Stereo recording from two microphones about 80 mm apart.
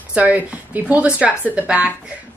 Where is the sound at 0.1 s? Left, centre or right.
Centre.